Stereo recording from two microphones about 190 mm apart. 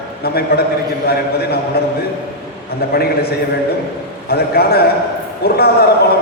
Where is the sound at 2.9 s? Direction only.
55° left (ahead or behind).